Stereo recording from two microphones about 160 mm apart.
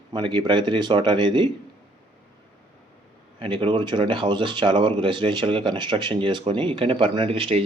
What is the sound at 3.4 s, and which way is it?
Speech, 35° right (ahead or behind).